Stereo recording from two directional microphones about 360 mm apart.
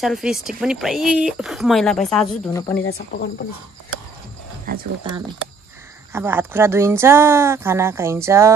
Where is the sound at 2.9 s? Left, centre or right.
Left.